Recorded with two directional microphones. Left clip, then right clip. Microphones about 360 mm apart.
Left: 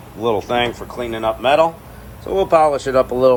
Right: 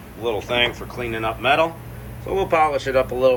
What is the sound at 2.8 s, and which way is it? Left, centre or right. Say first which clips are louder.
Speech: left 4 dB; left.